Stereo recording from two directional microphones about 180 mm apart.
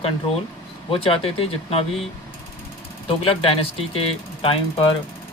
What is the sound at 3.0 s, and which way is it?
Speech, 30° left (ahead or behind).